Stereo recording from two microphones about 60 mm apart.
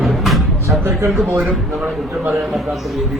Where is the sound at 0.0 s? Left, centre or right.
Centre.